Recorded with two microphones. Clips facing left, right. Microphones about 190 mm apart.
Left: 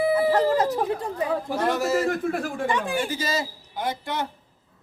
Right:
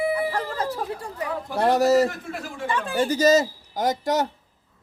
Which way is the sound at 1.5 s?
35° right (ahead or behind).